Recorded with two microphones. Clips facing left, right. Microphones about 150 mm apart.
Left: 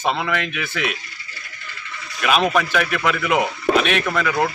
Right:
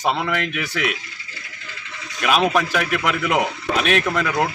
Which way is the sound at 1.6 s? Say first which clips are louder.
Left 3 dB; 90° right.